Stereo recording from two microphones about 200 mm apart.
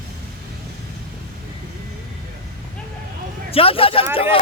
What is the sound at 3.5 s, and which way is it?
Speech, 30° left (ahead or behind).